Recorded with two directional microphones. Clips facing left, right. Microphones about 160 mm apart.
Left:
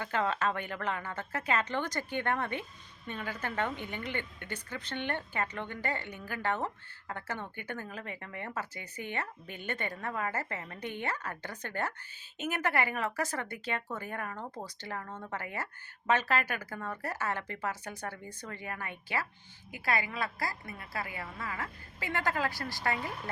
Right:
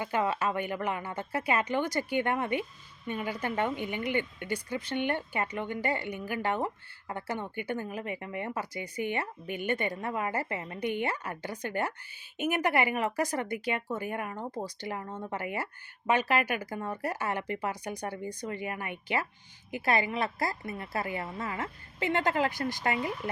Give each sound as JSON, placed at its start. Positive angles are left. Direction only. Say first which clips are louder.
{"t": 0.0, "sound": "a woman's voice", "louder": "right 2 dB", "side_deg": -15}